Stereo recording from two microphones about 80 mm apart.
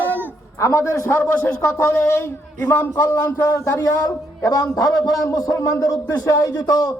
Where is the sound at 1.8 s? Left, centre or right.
Left.